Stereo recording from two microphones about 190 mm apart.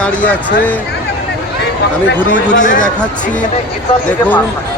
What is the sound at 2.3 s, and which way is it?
Speech, 40° left (ahead or behind).